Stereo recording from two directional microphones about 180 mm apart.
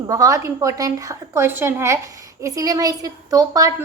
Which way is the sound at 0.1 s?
20° right (ahead or behind).